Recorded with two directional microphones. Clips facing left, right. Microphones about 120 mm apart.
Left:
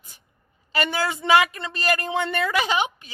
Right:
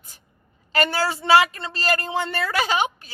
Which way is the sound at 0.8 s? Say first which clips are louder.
Right 2 dB; 35° right (ahead or behind).